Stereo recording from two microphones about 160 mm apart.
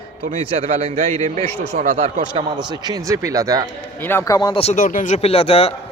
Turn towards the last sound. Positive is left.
turn(degrees=40)  # may be behind; listen again after turning